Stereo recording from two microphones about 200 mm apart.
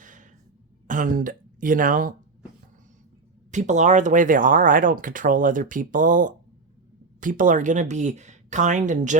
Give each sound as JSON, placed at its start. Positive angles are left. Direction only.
{"t": 0.0, "sound": "sigh", "side_deg": -40}
{"t": 0.9, "sound": "speech", "side_deg": -40}
{"t": 3.5, "sound": "speech", "side_deg": -35}